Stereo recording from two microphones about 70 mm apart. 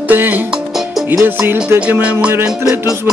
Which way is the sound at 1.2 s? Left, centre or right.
Right.